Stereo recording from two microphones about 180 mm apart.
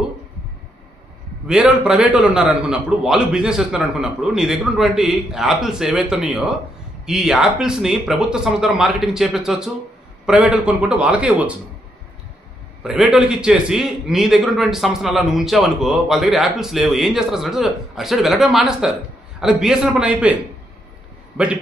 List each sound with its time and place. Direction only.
1.5 s a man's voice: 5° right (ahead or behind)
12.8 s a man's voice: 5° right (ahead or behind)